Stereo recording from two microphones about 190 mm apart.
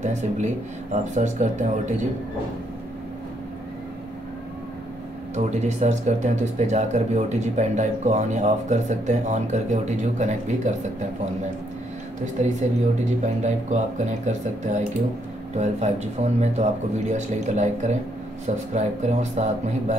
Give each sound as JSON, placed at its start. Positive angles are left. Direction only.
{"t": 0.0, "sound": "speech", "side_deg": -35}
{"t": 5.3, "sound": "speech", "side_deg": -35}
{"t": 12.4, "sound": "speech", "side_deg": -40}